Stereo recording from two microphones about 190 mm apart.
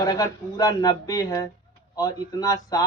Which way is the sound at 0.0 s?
20° left (ahead or behind).